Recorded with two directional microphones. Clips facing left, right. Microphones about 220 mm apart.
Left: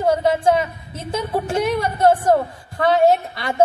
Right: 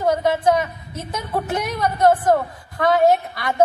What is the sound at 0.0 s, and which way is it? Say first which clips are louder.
A woman's voice: left 1 dB; 25° left (ahead or behind).